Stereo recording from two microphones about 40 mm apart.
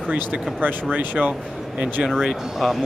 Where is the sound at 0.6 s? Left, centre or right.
Right.